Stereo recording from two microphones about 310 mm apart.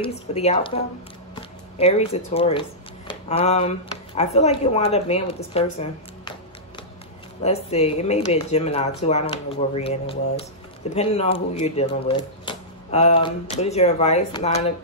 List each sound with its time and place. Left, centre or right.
0.0 s speech: centre
7.4 s speech: centre